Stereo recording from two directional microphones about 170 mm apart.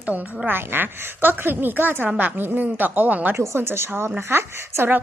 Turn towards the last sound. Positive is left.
turn(degrees=-15)  # may be behind; listen again after turning